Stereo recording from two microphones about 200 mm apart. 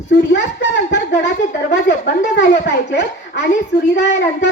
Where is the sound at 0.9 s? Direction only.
60° left (ahead or behind).